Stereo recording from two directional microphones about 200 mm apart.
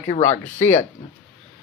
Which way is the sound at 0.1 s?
35° left (ahead or behind).